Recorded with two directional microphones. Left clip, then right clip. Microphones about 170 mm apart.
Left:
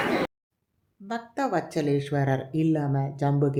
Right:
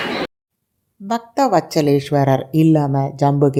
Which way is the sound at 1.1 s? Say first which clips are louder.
Right 12 dB; 35° right (ahead or behind).